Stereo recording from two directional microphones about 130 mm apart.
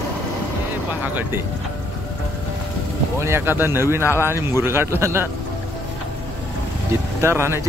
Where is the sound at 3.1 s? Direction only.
20° right (ahead or behind).